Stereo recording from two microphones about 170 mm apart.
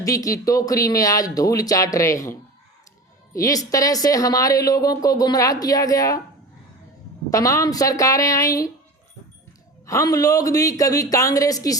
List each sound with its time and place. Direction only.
0.0 s speech: 20° left (ahead or behind)
7.3 s speech: 20° left (ahead or behind)
9.8 s speech: 20° left (ahead or behind)